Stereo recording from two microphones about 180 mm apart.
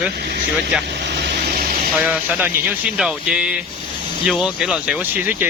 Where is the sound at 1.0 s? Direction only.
60° right (ahead or behind).